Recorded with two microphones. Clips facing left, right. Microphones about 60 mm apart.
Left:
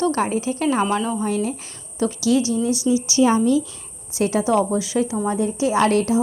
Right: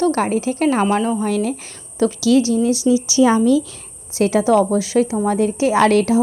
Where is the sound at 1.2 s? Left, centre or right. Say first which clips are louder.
Right 3 dB; right.